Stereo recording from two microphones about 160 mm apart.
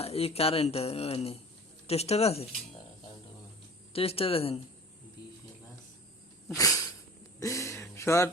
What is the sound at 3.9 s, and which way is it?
Speech, 35° left (ahead or behind).